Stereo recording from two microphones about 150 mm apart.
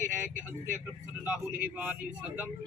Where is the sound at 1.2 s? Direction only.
10° right (ahead or behind).